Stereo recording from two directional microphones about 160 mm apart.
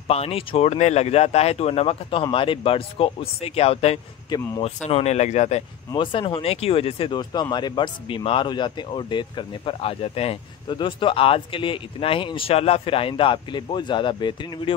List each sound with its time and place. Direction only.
0.1 s a man's voice: 40° left (ahead or behind)
5.9 s a man's voice: 30° left (ahead or behind)